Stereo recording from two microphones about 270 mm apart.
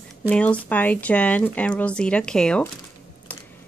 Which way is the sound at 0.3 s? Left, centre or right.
Centre.